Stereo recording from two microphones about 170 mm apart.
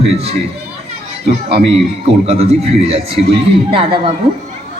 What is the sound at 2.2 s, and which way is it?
Speech, 35° right (ahead or behind).